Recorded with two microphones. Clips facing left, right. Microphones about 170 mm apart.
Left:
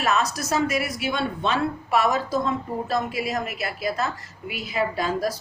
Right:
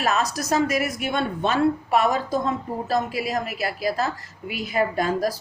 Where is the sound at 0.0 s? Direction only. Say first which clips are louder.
Even; 40° right (ahead or behind).